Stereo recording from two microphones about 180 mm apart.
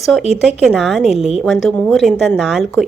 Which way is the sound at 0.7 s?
Centre (ahead or behind).